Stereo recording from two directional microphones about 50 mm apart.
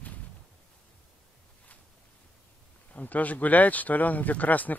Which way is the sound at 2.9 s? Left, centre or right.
Left.